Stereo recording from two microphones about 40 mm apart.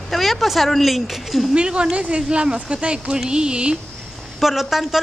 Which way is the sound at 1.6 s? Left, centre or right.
Right.